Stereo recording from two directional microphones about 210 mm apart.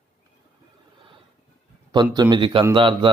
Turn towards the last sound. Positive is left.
turn(degrees=-25)  # may be behind; listen again after turning